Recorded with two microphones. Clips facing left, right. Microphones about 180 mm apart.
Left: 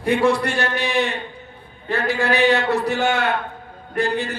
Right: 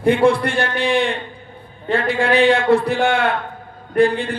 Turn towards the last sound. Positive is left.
turn(degrees=-55)  # may be behind; listen again after turning